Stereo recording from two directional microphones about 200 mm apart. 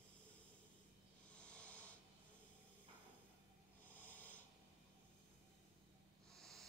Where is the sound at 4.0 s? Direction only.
10° left (ahead or behind).